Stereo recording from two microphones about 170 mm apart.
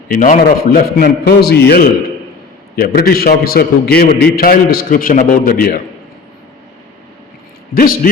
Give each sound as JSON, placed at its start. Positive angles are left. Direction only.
{"t": 0.1, "sound": "a man's voice", "side_deg": 55}